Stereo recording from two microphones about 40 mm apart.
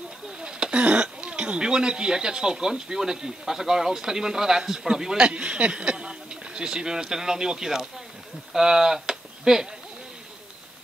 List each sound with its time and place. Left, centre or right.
0.4 s speech: right